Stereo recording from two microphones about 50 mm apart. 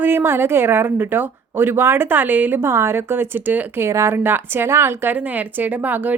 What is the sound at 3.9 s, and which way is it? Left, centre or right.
Speech, right.